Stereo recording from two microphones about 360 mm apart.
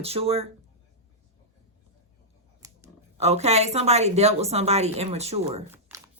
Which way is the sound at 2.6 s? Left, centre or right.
Centre.